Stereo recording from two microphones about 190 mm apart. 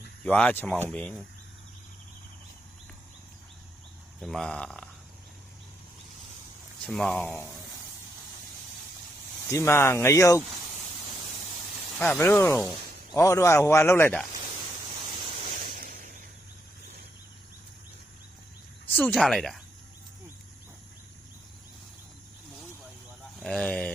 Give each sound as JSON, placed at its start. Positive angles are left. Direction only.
{"t": 0.3, "sound": "speech", "side_deg": 5}
{"t": 4.2, "sound": "speech", "side_deg": 0}
{"t": 6.8, "sound": "speech", "side_deg": 5}
{"t": 9.5, "sound": "speech", "side_deg": 15}
{"t": 11.9, "sound": "speech", "side_deg": 10}
{"t": 13.1, "sound": "speech", "side_deg": 15}
{"t": 15.8, "sound": "a sound", "side_deg": -45}
{"t": 18.9, "sound": "speech", "side_deg": 10}
{"t": 23.4, "sound": "speech", "side_deg": 5}